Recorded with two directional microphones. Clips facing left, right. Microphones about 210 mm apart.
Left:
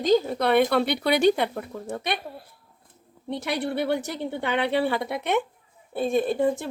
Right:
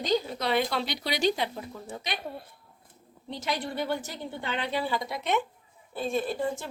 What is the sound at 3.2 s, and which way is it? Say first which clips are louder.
Speech: left 5 dB; 60° left (ahead or behind).